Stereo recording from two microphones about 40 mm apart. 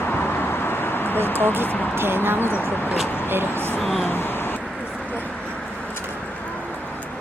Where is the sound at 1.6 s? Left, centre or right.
Left.